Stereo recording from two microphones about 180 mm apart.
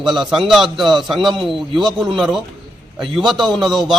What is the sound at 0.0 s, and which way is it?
A man's voice, centre (ahead or behind).